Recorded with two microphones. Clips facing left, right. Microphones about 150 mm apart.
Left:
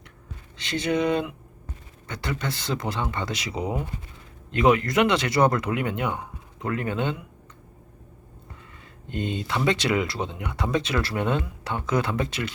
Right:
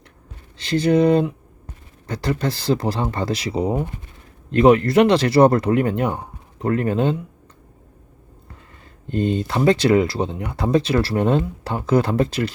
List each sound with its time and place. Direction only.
0.5 s speech: 35° right (ahead or behind)
9.0 s speech: 35° right (ahead or behind)